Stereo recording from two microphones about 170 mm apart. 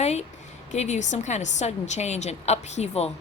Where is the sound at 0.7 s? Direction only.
45° left (ahead or behind).